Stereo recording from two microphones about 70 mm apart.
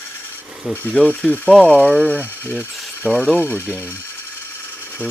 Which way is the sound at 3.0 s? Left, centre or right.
Left.